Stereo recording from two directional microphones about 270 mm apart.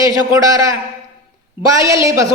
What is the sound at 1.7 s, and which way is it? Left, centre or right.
Speech, centre.